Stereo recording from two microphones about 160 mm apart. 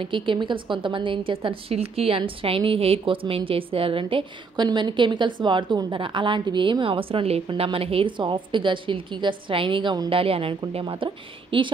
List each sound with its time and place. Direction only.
0.0 s a woman's voice: 30° right (ahead or behind)